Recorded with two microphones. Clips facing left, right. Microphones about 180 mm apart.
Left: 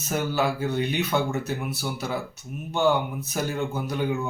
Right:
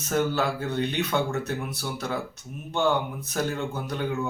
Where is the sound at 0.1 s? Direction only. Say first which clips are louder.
Even; 10° left (ahead or behind).